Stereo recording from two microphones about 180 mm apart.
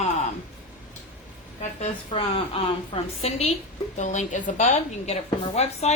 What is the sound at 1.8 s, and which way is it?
A woman's voice, 30° left (ahead or behind).